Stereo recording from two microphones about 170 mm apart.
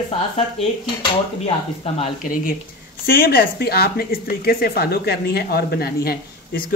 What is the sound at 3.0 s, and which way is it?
Speech, 60° left (ahead or behind).